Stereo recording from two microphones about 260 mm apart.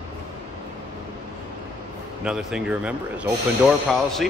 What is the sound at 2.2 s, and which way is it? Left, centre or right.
Speech, centre.